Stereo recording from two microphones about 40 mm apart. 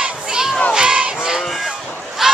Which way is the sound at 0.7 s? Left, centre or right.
Right.